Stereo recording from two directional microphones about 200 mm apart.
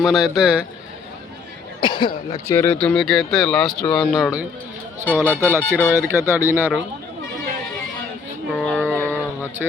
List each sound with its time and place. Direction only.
0.0 s speech: centre (ahead or behind)
1.8 s speech: 25° left (ahead or behind)
2.5 s speech: 10° left (ahead or behind)
5.0 s speech: 10° left (ahead or behind)
5.3 s speech: 10° right (ahead or behind)
8.6 s a sound: 5° left (ahead or behind)